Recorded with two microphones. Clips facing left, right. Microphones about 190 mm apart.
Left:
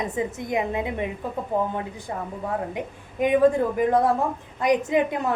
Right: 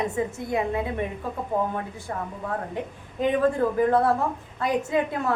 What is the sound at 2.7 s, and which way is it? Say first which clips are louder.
A woman's voice: even; 15° left (ahead or behind).